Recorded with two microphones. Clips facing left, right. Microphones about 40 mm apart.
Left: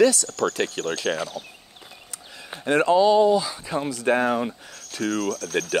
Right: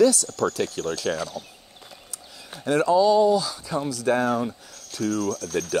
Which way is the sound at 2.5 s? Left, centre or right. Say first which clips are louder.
Left 1 dB; left.